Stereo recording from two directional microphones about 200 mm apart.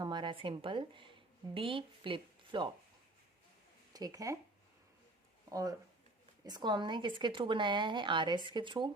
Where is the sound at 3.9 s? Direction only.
20° right (ahead or behind).